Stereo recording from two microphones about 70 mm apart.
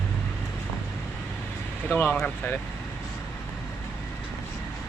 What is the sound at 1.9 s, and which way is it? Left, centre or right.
Speech, left.